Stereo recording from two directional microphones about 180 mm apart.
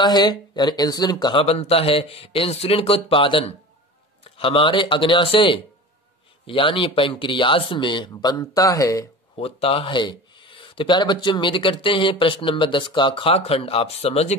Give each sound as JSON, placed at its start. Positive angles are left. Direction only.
{"t": 0.0, "sound": "speech", "side_deg": 25}
{"t": 9.3, "sound": "speech", "side_deg": 30}